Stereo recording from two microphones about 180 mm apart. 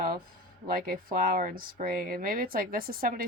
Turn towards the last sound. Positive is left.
turn(degrees=-50)  # may be behind; listen again after turning